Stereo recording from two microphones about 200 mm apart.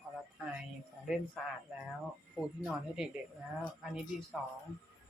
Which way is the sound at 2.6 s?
5° right (ahead or behind).